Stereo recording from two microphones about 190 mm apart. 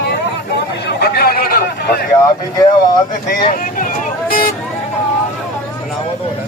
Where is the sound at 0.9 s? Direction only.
55° left (ahead or behind).